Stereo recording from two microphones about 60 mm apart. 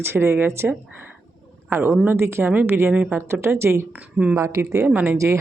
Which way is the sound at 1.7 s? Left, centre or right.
Right.